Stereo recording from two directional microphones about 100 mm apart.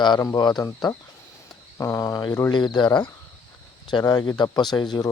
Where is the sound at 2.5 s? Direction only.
50° left (ahead or behind).